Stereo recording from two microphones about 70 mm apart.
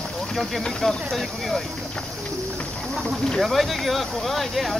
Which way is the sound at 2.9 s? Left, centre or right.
Centre.